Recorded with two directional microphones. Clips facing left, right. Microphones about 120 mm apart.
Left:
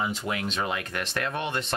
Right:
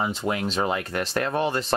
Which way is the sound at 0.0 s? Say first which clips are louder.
Right 4 dB; 35° right (ahead or behind).